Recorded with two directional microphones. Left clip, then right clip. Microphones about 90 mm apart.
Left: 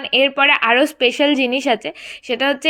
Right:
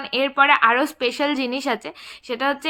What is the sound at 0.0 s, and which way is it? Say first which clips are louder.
A woman's voice: left 4 dB; 20° left (ahead or behind).